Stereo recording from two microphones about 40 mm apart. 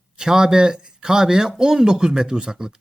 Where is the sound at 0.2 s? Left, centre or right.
Centre.